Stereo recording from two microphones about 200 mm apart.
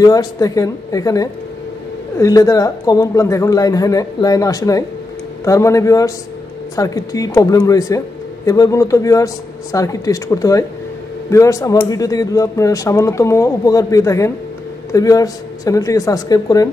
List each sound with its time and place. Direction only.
0.0 s speech: 20° left (ahead or behind)